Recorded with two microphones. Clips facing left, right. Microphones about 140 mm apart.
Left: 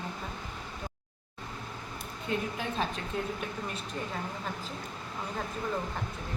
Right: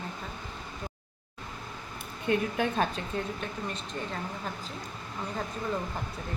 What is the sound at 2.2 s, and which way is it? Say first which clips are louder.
Speech: right 6 dB; 65° right (ahead or behind).